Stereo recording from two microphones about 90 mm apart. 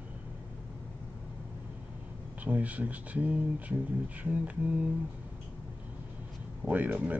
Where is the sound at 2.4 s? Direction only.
15° right (ahead or behind).